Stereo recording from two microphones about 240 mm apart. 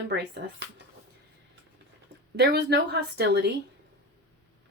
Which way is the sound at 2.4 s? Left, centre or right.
Right.